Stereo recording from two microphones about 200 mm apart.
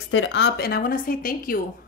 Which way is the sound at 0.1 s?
65° left (ahead or behind).